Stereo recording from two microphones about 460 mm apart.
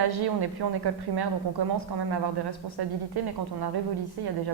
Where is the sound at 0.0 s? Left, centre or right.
Right.